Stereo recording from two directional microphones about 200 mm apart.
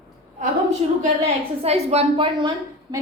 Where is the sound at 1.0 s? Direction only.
35° right (ahead or behind).